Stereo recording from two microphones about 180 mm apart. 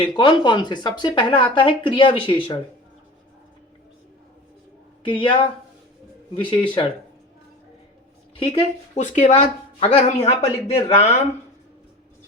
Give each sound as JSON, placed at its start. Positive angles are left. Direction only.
{"t": 0.0, "sound": "speech", "side_deg": 25}
{"t": 5.0, "sound": "speech", "side_deg": 30}
{"t": 8.4, "sound": "speech", "side_deg": 30}
{"t": 9.0, "sound": "speech", "side_deg": 40}